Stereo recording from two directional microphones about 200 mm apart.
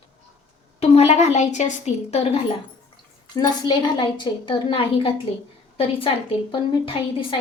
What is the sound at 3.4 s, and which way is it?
A woman's voice, 20° left (ahead or behind).